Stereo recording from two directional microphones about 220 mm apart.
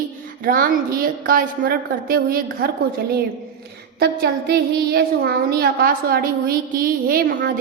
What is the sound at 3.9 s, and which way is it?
A woman's voice, 45° right (ahead or behind).